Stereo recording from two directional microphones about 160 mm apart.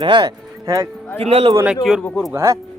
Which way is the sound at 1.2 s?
35° right (ahead or behind).